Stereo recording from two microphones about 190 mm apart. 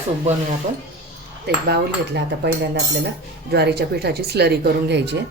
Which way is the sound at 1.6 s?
60° right (ahead or behind).